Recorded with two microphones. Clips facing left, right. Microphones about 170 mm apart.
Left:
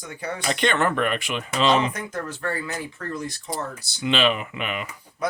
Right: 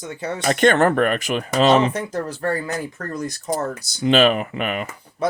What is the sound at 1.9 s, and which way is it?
Speech, 35° right (ahead or behind).